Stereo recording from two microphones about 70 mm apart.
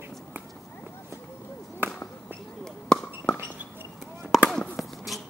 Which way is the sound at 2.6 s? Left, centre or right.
Centre.